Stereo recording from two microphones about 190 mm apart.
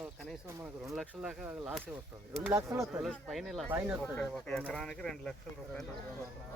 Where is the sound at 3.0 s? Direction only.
Centre (ahead or behind).